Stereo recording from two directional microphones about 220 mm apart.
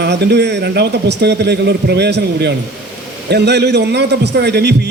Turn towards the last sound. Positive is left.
turn(degrees=-50)  # may be behind; listen again after turning